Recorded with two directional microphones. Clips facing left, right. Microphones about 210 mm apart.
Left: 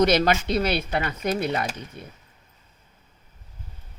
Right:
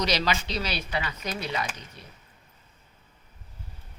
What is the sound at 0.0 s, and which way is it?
Speech, 55° left (ahead or behind).